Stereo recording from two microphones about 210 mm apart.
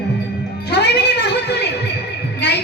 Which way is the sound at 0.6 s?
50° left (ahead or behind).